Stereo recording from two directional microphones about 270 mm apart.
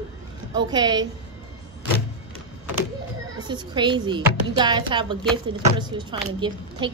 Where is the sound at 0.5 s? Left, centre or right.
Centre.